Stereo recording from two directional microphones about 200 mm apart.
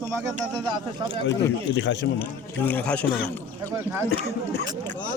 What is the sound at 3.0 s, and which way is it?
Speech, 55° left (ahead or behind).